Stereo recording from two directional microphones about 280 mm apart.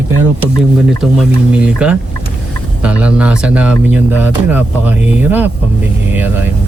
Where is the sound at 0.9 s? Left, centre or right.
Centre.